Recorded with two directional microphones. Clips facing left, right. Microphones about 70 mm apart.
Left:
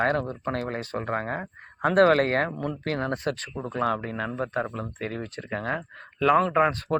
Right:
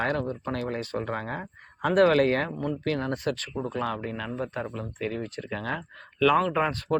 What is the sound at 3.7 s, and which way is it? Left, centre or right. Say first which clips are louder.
Speech: left 6 dB; left.